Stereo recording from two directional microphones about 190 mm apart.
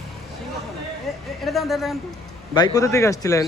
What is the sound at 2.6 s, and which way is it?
Speech, 20° left (ahead or behind).